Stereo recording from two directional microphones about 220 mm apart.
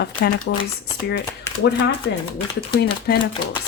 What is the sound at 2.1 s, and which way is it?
Speech, 55° left (ahead or behind).